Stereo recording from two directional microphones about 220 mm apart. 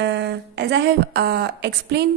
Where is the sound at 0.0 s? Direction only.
50° right (ahead or behind).